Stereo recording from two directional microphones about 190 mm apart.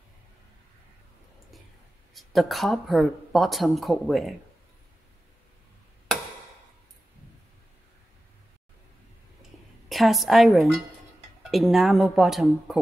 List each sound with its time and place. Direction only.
2.1 s speech: centre (ahead or behind)
9.4 s a sound: centre (ahead or behind)
11.5 s speech: centre (ahead or behind)